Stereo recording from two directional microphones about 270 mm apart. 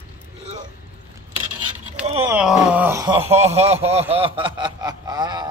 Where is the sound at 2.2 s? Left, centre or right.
Centre.